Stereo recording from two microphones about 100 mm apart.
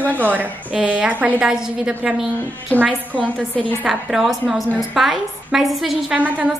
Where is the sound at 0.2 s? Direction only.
15° right (ahead or behind).